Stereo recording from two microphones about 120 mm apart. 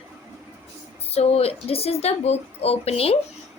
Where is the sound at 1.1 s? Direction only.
60° left (ahead or behind).